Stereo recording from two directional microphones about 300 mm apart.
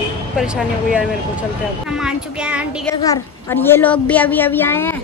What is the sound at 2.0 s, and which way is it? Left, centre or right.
Speech, centre.